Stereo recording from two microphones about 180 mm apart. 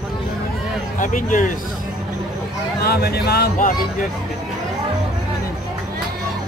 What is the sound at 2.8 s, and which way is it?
Speech, 60° left (ahead or behind).